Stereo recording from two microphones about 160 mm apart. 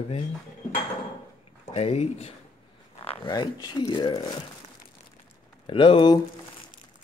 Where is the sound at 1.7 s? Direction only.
40° left (ahead or behind).